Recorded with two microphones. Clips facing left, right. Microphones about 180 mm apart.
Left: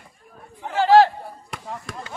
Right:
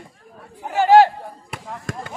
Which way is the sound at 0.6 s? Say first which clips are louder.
Right 2 dB; 15° right (ahead or behind).